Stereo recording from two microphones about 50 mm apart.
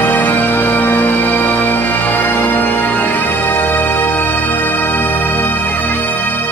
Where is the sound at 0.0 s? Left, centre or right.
Left.